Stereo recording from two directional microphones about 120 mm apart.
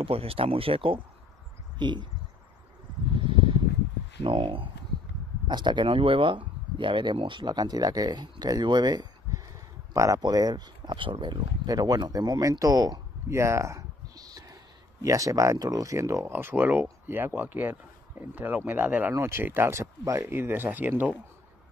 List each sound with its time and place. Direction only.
0.0 s speech: 50° right (ahead or behind)
4.2 s speech: 45° right (ahead or behind); by 21.2 s 15° right (ahead or behind)